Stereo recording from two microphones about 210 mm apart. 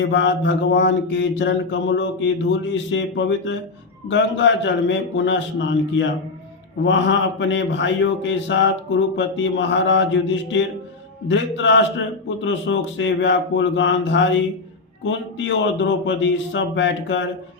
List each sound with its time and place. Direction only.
0.0 s mantra: 60° left (ahead or behind)